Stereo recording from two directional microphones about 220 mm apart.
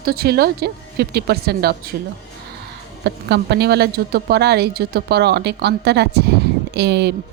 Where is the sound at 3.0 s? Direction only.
50° right (ahead or behind).